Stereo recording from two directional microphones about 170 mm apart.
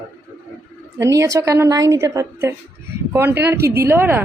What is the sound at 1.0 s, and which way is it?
A woman's voice, 20° right (ahead or behind).